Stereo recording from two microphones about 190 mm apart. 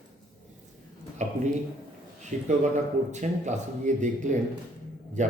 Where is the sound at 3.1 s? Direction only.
40° right (ahead or behind).